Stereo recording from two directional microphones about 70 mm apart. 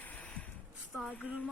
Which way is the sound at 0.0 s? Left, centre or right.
Left.